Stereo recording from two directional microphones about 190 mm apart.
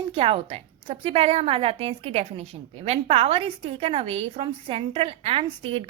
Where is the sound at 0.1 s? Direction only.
30° right (ahead or behind).